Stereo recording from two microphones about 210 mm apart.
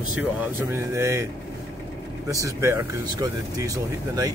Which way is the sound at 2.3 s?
15° right (ahead or behind).